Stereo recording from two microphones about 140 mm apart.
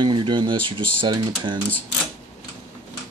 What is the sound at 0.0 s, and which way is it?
Speech, 35° right (ahead or behind).